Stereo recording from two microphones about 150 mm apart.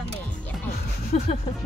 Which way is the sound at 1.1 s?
50° left (ahead or behind).